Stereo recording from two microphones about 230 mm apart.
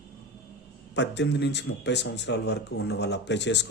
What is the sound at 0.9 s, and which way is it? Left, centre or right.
Speech, left.